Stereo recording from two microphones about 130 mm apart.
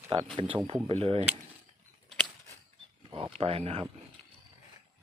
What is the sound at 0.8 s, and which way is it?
Speech, 45° right (ahead or behind).